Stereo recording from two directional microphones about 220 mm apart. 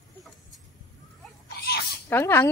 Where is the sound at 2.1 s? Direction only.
10° left (ahead or behind).